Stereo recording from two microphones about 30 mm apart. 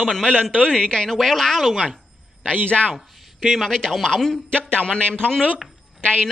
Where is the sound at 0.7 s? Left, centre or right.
Left.